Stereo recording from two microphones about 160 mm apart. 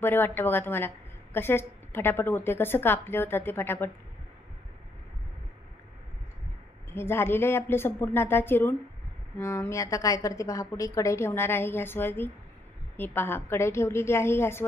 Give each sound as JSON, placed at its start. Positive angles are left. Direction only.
{"t": 0.0, "sound": "a woman's voice", "side_deg": 15}
{"t": 6.9, "sound": "a woman's voice", "side_deg": 15}